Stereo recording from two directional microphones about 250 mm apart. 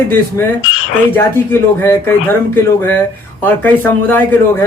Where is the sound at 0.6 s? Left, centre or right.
Left.